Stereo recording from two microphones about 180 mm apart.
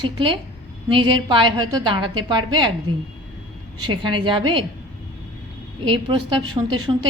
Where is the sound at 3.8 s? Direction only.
25° right (ahead or behind).